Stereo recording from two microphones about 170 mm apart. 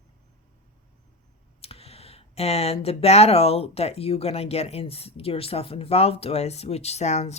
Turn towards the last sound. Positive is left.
turn(degrees=40)  # may be behind; listen again after turning